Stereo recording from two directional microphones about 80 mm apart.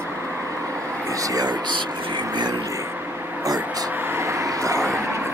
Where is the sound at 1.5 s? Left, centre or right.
Right.